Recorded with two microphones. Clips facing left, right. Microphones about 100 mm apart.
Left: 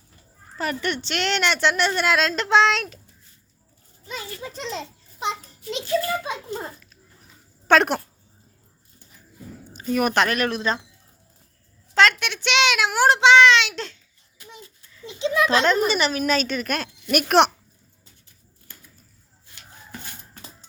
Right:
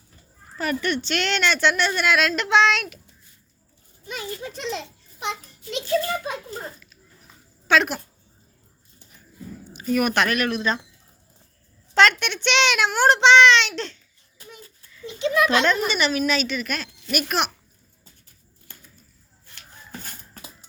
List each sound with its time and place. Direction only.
0.5 s a woman's voice: 25° left (ahead or behind)
4.5 s a sound: 35° left (ahead or behind)
7.7 s speech: 55° left (ahead or behind)
9.7 s a woman's voice: 30° left (ahead or behind)
11.9 s a child's voice: centre (ahead or behind)
15.2 s speech: 30° left (ahead or behind); by 17.5 s 65° left (ahead or behind)